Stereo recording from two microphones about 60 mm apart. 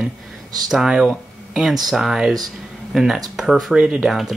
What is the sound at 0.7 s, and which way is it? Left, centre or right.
Speech, centre.